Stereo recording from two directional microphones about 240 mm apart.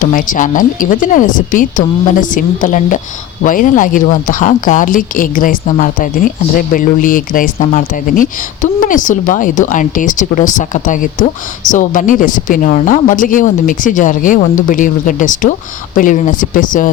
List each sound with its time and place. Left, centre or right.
0.0 s speech: left